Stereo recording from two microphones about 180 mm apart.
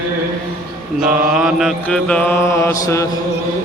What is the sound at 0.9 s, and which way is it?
Mantra, 5° right (ahead or behind).